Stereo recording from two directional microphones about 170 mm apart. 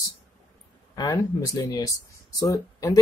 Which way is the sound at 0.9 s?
20° left (ahead or behind).